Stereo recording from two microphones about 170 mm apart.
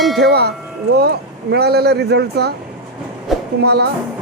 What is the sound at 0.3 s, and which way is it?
Speech, 70° right (ahead or behind).